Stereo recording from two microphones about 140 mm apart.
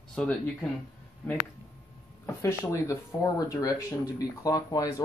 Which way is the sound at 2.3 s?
20° left (ahead or behind).